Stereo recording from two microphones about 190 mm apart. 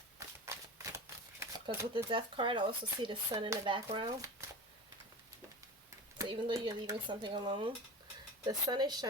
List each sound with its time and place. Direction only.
0.5 s a sound: 15° right (ahead or behind)
0.9 s speech: 20° right (ahead or behind)
6.1 s speech: 15° right (ahead or behind)